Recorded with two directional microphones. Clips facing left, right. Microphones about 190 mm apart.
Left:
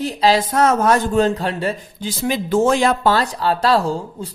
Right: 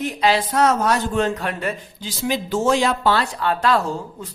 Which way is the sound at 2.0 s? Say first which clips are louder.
Left 2 dB; 55° left (ahead or behind).